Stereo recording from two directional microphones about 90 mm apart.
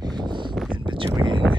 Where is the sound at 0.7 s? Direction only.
65° right (ahead or behind).